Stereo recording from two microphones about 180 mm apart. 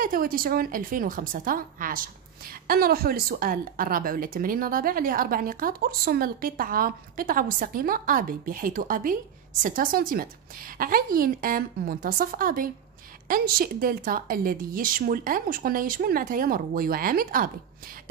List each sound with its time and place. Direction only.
0.0 s a woman's voice: 55° right (ahead or behind)